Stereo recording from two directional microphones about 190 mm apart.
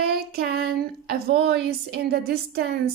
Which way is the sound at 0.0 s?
55° right (ahead or behind).